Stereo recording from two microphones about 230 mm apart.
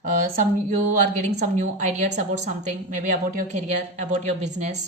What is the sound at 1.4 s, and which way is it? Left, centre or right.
A woman's voice, right.